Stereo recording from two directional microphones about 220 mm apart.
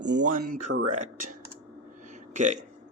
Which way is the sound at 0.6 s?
90° right.